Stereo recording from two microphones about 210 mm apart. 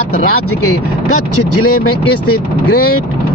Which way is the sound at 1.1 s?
90° left.